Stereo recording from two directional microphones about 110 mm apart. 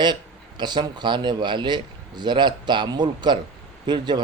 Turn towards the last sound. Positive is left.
turn(degrees=-40)  # may be behind; listen again after turning